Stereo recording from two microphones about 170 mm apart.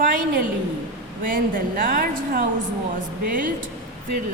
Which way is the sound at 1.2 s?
55° right (ahead or behind).